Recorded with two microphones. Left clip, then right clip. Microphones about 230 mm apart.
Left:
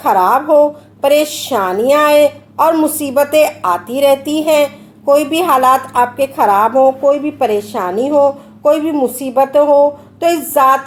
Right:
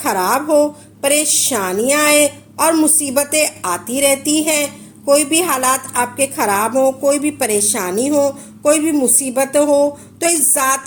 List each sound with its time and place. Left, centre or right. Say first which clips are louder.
0.0 s a woman's voice: left 6 dB; right